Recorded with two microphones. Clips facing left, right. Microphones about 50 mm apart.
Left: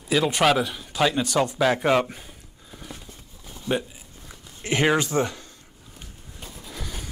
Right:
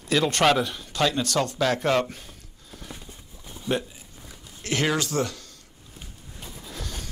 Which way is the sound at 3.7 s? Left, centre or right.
Centre.